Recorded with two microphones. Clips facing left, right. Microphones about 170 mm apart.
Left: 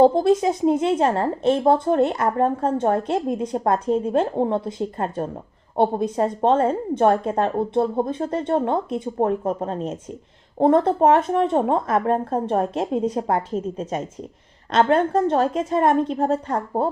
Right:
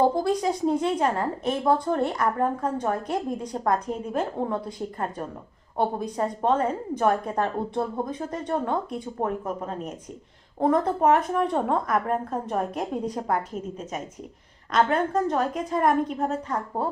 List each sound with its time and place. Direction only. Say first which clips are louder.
0.0 s speech: left 7 dB; 25° left (ahead or behind)